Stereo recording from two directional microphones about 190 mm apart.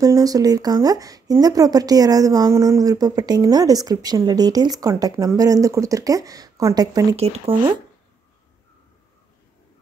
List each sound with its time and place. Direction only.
0.0 s speech: 20° right (ahead or behind)
7.2 s speech: 30° right (ahead or behind)